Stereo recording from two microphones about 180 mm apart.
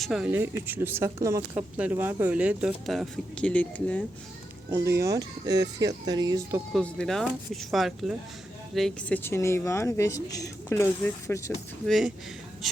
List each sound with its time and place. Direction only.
0.0 s speech: 5° right (ahead or behind)
4.7 s speech: 15° right (ahead or behind)
6.7 s speech: 5° left (ahead or behind)
11.9 s speech: centre (ahead or behind)